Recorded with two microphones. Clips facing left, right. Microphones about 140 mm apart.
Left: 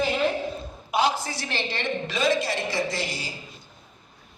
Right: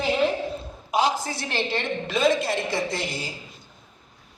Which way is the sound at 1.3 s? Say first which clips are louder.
Right 3 dB; 50° right (ahead or behind).